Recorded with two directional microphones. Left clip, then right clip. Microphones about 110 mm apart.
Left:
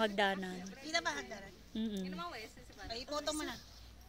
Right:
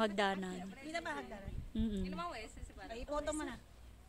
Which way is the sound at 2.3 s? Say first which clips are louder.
Even; 30° right (ahead or behind).